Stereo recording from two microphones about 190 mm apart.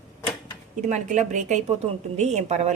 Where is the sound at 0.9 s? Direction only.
40° right (ahead or behind).